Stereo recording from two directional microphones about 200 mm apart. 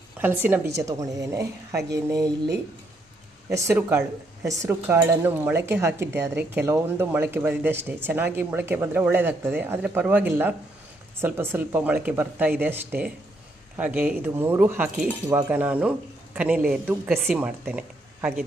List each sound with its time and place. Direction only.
0.2 s speech: 10° right (ahead or behind)
3.5 s a man's voice: 15° right (ahead or behind)